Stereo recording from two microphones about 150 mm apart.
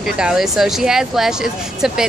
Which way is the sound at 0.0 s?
5° right (ahead or behind).